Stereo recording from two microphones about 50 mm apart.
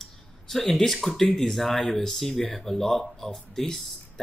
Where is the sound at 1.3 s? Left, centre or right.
Centre.